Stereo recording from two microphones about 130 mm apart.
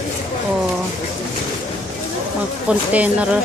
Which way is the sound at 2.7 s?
10° right (ahead or behind).